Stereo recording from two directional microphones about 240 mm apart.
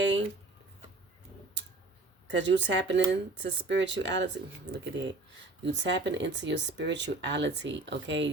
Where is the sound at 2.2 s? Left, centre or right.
Right.